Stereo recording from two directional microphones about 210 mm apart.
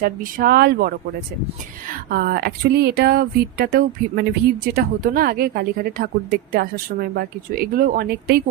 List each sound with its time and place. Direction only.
0.0 s speech: 45° right (ahead or behind)
2.0 s speech: 45° right (ahead or behind)